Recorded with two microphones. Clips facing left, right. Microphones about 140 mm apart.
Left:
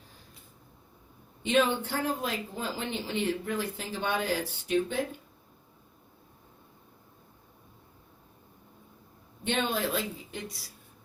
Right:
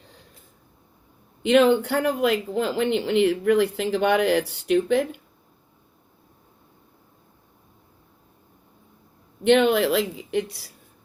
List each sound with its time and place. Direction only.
1.4 s speech: 75° right (ahead or behind)
9.4 s speech: 75° right (ahead or behind)